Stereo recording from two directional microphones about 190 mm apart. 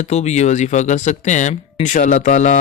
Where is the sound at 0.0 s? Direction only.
35° left (ahead or behind).